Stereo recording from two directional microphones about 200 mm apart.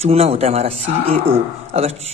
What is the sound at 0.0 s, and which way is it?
Speech, 30° right (ahead or behind).